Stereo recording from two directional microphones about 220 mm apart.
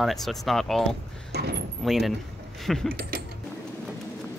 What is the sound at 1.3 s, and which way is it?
Speech, 45° right (ahead or behind).